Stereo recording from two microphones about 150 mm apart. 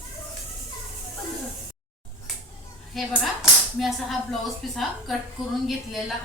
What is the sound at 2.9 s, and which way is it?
A woman's voice, centre (ahead or behind).